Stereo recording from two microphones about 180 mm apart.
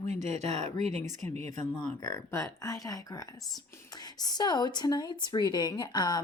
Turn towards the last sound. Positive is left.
turn(degrees=25)  # may be behind; listen again after turning